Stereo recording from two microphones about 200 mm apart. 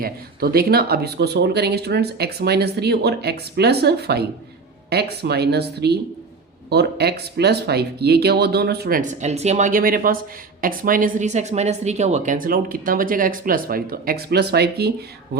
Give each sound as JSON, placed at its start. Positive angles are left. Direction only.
{"t": 0.0, "sound": "speech", "side_deg": -50}